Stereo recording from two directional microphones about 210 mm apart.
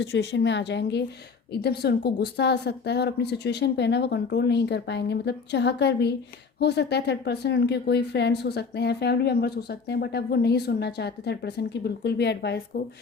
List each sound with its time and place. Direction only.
0.0 s a woman's voice: 55° left (ahead or behind)